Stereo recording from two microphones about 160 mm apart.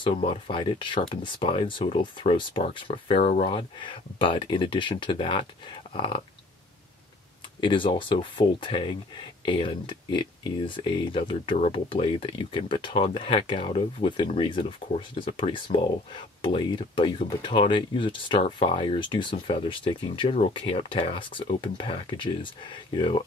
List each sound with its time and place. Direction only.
0.0 s speech: 30° left (ahead or behind)
7.6 s speech: 30° left (ahead or behind)